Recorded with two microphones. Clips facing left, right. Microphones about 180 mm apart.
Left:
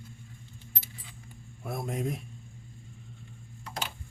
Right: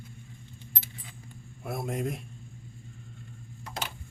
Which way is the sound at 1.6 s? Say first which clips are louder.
Right 1 dB; 5° right (ahead or behind).